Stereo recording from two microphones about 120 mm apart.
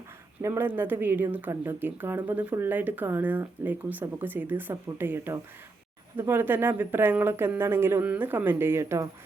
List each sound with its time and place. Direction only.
0.4 s speech: 20° right (ahead or behind)